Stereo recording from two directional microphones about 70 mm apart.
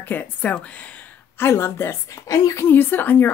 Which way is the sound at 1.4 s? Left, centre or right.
Left.